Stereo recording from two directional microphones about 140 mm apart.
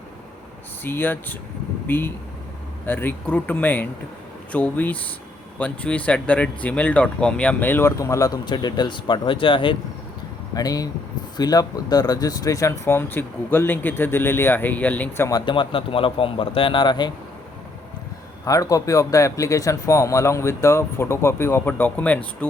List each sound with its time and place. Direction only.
0.9 s speech: 15° left (ahead or behind); by 9.7 s 35° left (ahead or behind)
10.5 s speech: 25° left (ahead or behind)
15.4 s a man's voice: 35° left (ahead or behind)
18.4 s speech: 25° left (ahead or behind)